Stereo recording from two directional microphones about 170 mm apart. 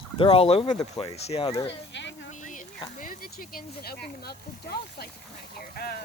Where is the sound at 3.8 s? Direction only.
65° left (ahead or behind).